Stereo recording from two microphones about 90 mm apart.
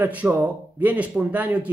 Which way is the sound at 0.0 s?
20° right (ahead or behind).